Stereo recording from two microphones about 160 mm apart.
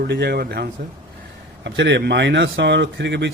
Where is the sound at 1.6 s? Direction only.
90° right.